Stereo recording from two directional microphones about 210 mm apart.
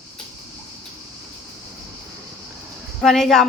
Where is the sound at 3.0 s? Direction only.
Centre (ahead or behind).